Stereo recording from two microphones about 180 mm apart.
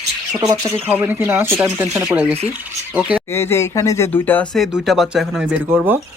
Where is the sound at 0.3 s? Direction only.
20° right (ahead or behind).